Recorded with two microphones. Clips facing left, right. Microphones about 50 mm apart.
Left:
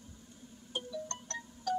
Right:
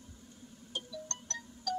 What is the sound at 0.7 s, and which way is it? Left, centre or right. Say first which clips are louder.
Music: left 3 dB; centre.